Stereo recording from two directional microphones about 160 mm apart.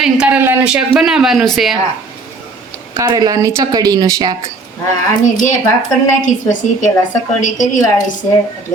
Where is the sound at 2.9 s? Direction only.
25° right (ahead or behind).